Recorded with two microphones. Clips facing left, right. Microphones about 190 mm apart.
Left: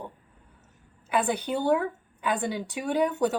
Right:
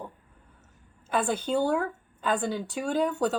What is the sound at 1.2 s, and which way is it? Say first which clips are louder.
Speech: right 3 dB; 15° left (ahead or behind).